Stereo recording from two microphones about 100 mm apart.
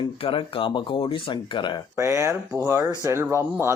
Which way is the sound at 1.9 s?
25° right (ahead or behind).